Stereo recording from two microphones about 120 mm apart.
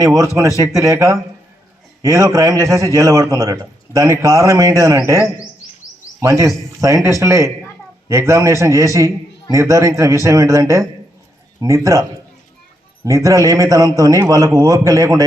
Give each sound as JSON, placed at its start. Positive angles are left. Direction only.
{"t": 0.0, "sound": "a man's voice", "side_deg": -25}
{"t": 13.1, "sound": "a man's voice", "side_deg": -25}